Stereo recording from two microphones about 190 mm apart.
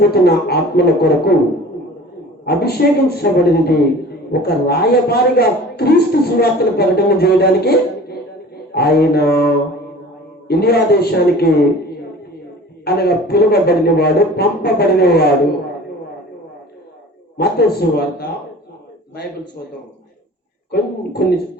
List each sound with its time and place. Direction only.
0.1 s a woman's voice: 55° left (ahead or behind)
2.5 s a woman's voice: 55° left (ahead or behind)
10.5 s a woman's voice: 55° left (ahead or behind)
12.8 s a woman's voice: 55° left (ahead or behind)
17.3 s a woman's voice: 55° left (ahead or behind)
20.7 s a woman's voice: 55° left (ahead or behind)